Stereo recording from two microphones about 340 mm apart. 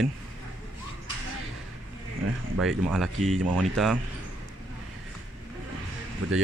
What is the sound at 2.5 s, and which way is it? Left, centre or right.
Speech, centre.